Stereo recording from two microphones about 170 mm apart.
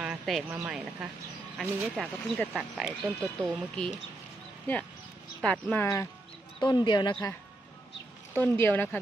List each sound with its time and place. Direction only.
0.0 s a woman's voice: 5° right (ahead or behind)
5.4 s speech: 5° left (ahead or behind)
6.6 s speech: 25° left (ahead or behind)
8.3 s speech: 10° left (ahead or behind)